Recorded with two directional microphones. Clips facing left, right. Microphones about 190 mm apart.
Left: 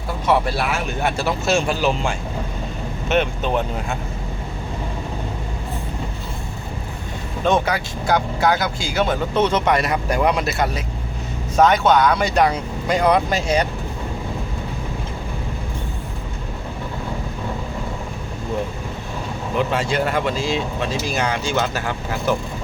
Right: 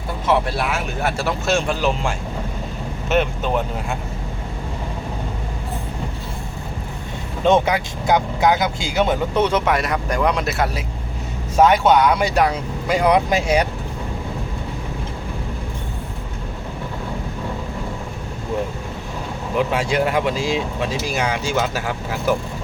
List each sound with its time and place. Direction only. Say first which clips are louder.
0.3 s speech: even; centre (ahead or behind)
7.4 s speech: right 3 dB; 20° right (ahead or behind)
19.5 s speech: right 1 dB; 10° right (ahead or behind)